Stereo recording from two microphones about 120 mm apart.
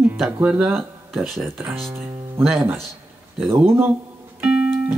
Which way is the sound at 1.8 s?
20° right (ahead or behind).